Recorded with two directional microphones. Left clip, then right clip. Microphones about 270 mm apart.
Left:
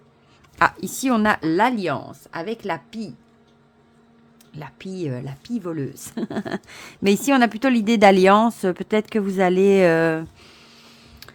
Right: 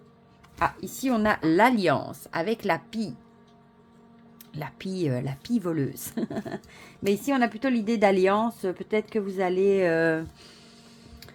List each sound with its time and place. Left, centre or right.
0.6 s speech: left; by 3.2 s centre
4.5 s speech: centre
6.2 s a woman's voice: left